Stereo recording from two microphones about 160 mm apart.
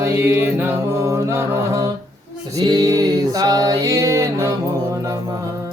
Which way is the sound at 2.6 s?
25° right (ahead or behind).